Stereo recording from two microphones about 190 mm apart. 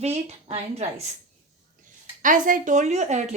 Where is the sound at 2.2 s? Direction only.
45° right (ahead or behind).